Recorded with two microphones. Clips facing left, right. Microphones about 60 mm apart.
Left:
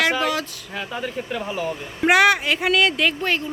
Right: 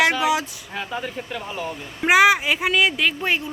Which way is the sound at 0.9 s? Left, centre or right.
Centre.